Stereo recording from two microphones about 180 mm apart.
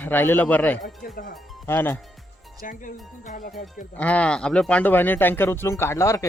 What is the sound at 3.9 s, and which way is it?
A man's voice, 5° left (ahead or behind).